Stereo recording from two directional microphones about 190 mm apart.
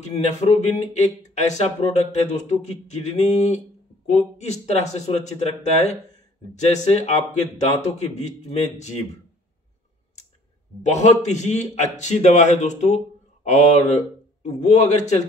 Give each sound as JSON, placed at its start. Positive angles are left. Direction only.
{"t": 0.0, "sound": "a man's voice", "side_deg": 40}
{"t": 10.8, "sound": "a man's voice", "side_deg": 35}